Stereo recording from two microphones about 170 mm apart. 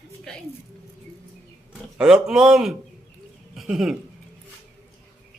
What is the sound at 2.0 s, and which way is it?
Speech, 5° right (ahead or behind).